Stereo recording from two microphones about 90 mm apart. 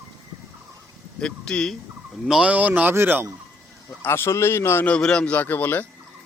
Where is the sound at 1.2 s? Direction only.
10° left (ahead or behind).